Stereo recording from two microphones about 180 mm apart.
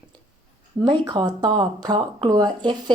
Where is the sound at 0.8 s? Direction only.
20° right (ahead or behind).